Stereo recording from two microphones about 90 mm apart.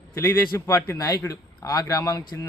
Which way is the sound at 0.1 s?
30° left (ahead or behind).